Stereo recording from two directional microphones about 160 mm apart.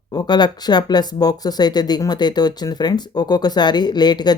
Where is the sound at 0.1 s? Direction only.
25° left (ahead or behind).